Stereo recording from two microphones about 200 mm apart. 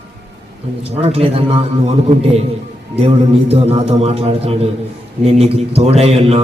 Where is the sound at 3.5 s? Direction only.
30° right (ahead or behind).